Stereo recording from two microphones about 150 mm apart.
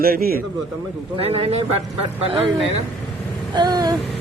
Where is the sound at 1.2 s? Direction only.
40° right (ahead or behind).